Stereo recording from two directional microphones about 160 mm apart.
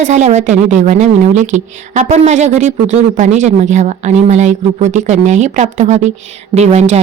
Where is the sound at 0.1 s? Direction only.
45° right (ahead or behind).